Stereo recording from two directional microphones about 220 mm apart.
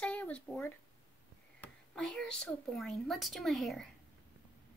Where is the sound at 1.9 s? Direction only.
5° left (ahead or behind).